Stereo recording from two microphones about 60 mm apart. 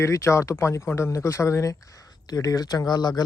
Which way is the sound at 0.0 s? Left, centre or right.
Left.